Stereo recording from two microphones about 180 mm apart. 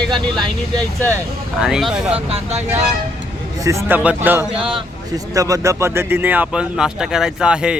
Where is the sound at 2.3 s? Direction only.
35° right (ahead or behind).